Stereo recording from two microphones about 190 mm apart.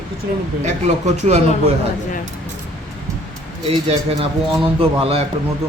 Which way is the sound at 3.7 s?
30° right (ahead or behind).